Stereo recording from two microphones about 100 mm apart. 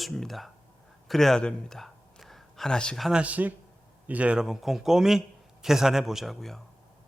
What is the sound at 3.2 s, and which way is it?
A man's voice, 15° right (ahead or behind).